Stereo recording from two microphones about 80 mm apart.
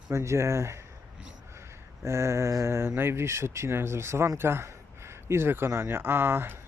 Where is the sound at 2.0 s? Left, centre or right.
Right.